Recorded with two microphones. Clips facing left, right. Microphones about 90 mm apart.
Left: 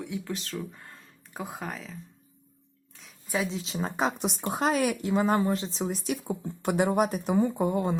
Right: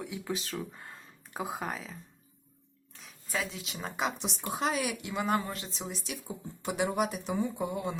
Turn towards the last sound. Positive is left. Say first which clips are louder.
# left 7 dB
turn(degrees=45)  # may be behind; listen again after turning